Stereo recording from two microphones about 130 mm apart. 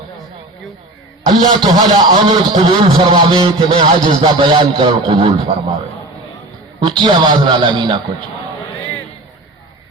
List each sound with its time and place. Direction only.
1.3 s a man's voice: 30° right (ahead or behind)
6.7 s a man's voice: 35° right (ahead or behind)